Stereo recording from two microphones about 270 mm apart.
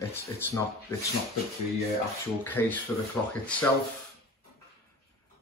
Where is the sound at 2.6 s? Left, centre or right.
Centre.